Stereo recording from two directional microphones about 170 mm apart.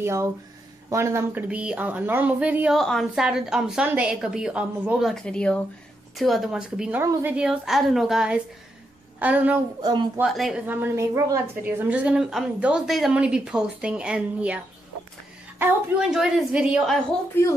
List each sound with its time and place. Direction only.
0.0 s a woman's voice: 15° right (ahead or behind)
2.8 s a woman's voice: centre (ahead or behind)
7.0 s a woman's voice: 15° right (ahead or behind)
9.8 s speech: 25° right (ahead or behind)
10.1 s a woman's voice: centre (ahead or behind)
10.7 s a woman's voice: 15° right (ahead or behind)
15.6 s a woman's voice: 5° right (ahead or behind)